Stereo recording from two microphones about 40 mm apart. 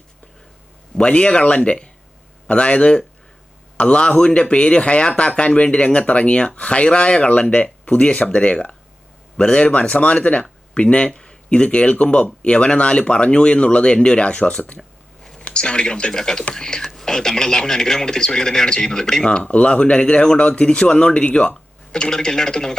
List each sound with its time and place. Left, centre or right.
0.9 s speech: left
14.8 s a sound: centre
15.4 s speech: left
21.5 s speech: centre